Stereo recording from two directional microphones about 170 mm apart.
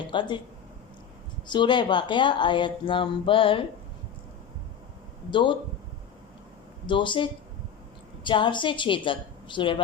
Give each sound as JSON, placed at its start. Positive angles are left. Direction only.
{"t": 0.1, "sound": "speech", "side_deg": 30}
{"t": 1.5, "sound": "speech", "side_deg": 30}
{"t": 5.3, "sound": "speech", "side_deg": 30}
{"t": 6.8, "sound": "speech", "side_deg": 30}